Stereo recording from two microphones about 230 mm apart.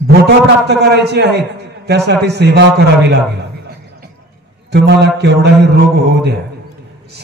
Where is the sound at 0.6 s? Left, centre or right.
Right.